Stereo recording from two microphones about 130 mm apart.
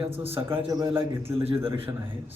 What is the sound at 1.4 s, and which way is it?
Speech, 45° right (ahead or behind).